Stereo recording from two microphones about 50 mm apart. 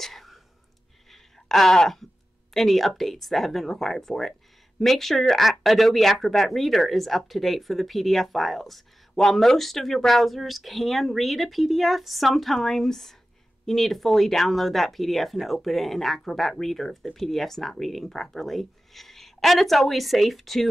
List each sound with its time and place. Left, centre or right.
0.0 s whispering: centre
1.1 s a sound: centre
2.5 s speech: centre